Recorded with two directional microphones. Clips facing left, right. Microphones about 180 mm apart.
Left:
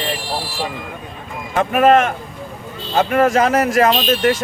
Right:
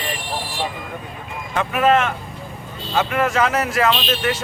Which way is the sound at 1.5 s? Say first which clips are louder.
Left 4 dB; 45° left (ahead or behind).